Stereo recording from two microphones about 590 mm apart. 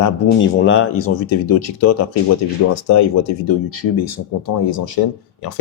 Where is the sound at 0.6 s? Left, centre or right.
Centre.